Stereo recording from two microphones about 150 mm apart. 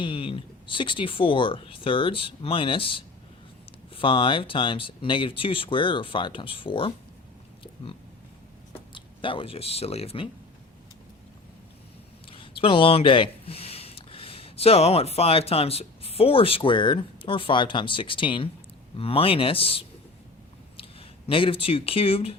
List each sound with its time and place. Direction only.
0.0 s speech: 35° left (ahead or behind)
8.9 s speech: 35° left (ahead or behind)
12.3 s speech: 35° left (ahead or behind)
21.2 s speech: 35° left (ahead or behind)